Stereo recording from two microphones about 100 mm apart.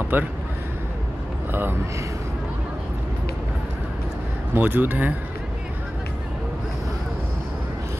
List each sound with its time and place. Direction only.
0.1 s speech: 20° right (ahead or behind)
1.5 s speech: 20° right (ahead or behind)
4.6 s speech: 20° right (ahead or behind)